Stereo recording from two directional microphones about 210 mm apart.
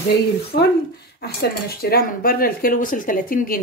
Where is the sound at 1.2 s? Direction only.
50° left (ahead or behind).